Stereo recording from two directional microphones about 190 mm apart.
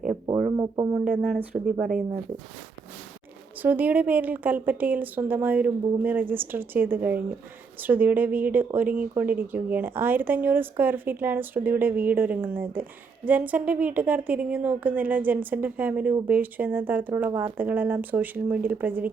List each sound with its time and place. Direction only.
0.5 s speech: 20° right (ahead or behind)
1.1 s speech: centre (ahead or behind)
3.6 s speech: 10° right (ahead or behind)